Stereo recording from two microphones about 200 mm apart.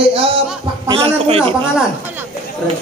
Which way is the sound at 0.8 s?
25° right (ahead or behind).